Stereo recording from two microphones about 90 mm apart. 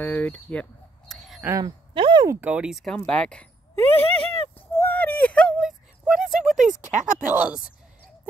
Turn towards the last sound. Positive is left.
turn(degrees=-10)  # may be behind; listen again after turning